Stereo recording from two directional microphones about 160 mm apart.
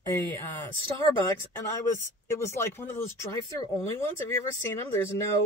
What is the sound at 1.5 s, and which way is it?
Speech, 15° left (ahead or behind).